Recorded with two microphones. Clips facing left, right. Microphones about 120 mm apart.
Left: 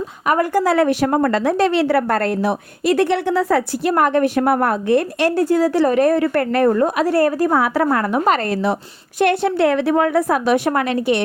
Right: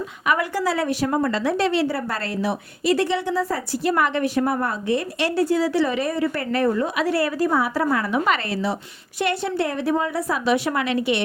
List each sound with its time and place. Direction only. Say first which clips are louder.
0.3 s a woman's voice: left 6 dB; 45° left (ahead or behind); by 3.9 s 70° left (ahead or behind)
3.9 s a woman's voice: left 7 dB; 45° left (ahead or behind)